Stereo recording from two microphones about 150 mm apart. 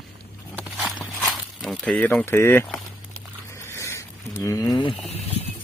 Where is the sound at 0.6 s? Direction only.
Centre (ahead or behind); by 2.6 s 15° left (ahead or behind).